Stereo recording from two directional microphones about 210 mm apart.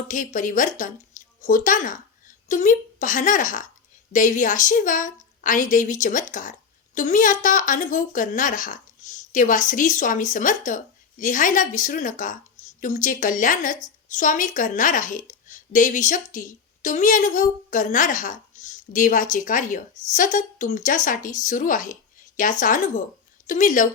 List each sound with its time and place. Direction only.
0.1 s a woman's voice: 40° left (ahead or behind)